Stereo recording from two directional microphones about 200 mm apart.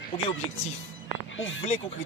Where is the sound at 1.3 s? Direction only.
70° left (ahead or behind).